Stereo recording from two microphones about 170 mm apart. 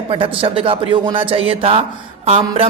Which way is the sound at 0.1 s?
30° right (ahead or behind).